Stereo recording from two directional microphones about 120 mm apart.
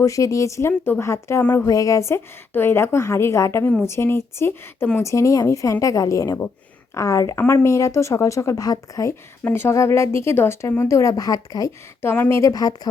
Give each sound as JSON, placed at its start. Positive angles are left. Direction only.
{"t": 0.0, "sound": "speech", "side_deg": 30}
{"t": 1.6, "sound": "speech", "side_deg": 30}
{"t": 12.0, "sound": "speech", "side_deg": 15}
{"t": 12.4, "sound": "speech", "side_deg": 30}